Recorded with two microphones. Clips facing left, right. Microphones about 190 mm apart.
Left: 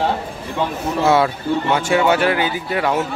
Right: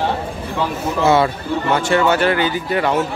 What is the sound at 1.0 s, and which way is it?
A man's voice, centre (ahead or behind).